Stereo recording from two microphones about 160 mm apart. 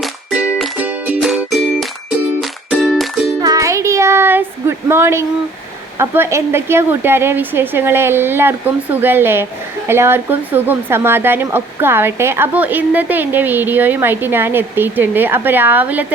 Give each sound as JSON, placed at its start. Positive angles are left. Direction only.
{"t": 0.0, "sound": "music", "side_deg": -5}
{"t": 3.4, "sound": "a sound", "side_deg": -20}
{"t": 6.0, "sound": "a woman's voice", "side_deg": -15}